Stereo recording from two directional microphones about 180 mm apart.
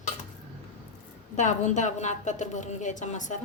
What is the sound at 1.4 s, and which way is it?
A woman's voice, 40° left (ahead or behind).